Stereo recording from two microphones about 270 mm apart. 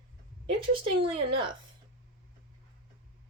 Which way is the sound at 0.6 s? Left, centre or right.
Centre.